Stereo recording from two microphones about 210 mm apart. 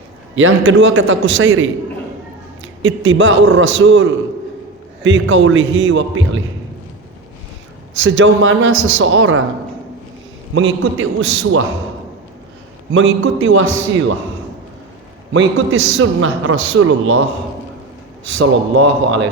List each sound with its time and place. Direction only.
0.3 s a man's voice: 70° right (ahead or behind)
2.8 s a man's voice: 65° right (ahead or behind)
7.9 s a man's voice: 65° right (ahead or behind)
10.5 s a man's voice: 65° right (ahead or behind)
12.9 s a man's voice: 70° right (ahead or behind)
15.3 s a man's voice: 70° right (ahead or behind)
18.3 s a man's voice: 65° right (ahead or behind)